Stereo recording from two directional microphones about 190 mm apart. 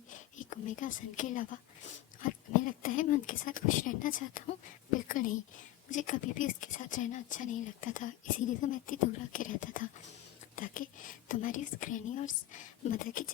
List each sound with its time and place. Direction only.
0.1 s speech: 40° left (ahead or behind)
4.9 s a sound: 45° left (ahead or behind)
5.9 s speech: 40° left (ahead or behind)